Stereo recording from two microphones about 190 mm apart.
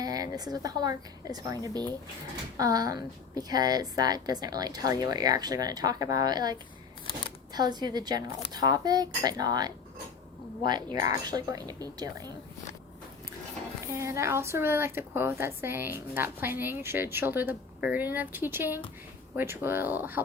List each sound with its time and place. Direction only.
0.0 s a woman's voice: 20° right (ahead or behind)
10.9 s a woman's voice: 20° right (ahead or behind)
13.8 s a woman's voice: 15° right (ahead or behind)